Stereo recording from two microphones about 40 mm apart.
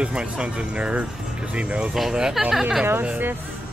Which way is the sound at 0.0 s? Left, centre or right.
Right.